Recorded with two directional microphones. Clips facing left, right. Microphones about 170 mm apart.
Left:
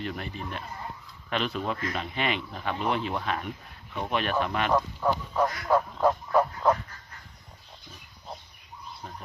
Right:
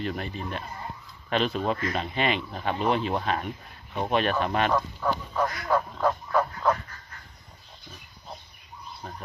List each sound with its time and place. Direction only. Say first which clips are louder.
0.0 s speech: right 3 dB; 30° right (ahead or behind)
4.7 s speech: left 1 dB; 10° left (ahead or behind)